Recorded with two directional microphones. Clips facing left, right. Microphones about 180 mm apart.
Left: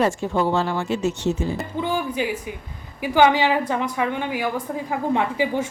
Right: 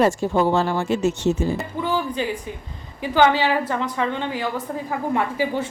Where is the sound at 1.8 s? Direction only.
15° left (ahead or behind).